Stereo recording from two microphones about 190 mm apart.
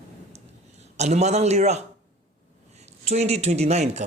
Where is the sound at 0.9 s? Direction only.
35° right (ahead or behind).